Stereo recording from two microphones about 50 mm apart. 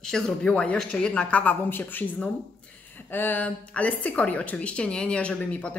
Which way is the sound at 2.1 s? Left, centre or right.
Left.